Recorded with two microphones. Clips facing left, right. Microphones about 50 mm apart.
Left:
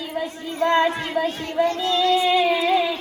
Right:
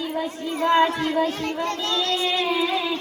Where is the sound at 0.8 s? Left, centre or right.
Centre.